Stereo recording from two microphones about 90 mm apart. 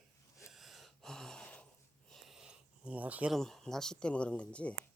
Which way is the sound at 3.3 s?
5° left (ahead or behind).